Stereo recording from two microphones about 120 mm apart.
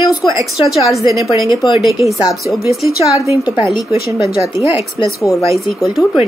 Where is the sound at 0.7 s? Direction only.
Centre (ahead or behind).